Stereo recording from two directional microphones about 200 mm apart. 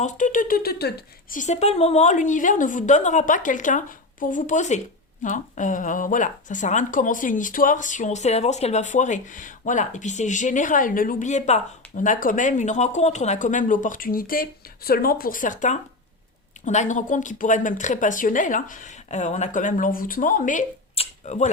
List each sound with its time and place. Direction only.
0.0 s a woman's voice: 40° left (ahead or behind)